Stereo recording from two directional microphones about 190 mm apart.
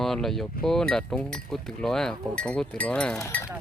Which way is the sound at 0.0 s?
Centre (ahead or behind).